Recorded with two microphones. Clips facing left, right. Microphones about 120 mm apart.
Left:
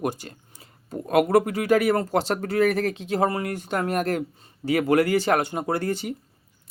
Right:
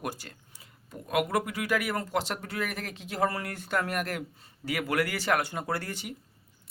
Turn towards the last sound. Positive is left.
turn(degrees=30)  # may be behind; listen again after turning